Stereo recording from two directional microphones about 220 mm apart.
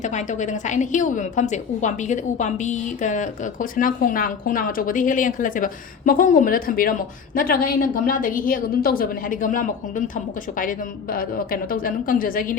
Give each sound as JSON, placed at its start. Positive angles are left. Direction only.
{"t": 0.0, "sound": "a woman's voice", "side_deg": 35}